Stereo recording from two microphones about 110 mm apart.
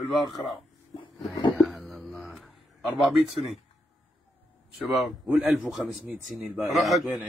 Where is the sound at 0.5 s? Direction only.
50° left (ahead or behind).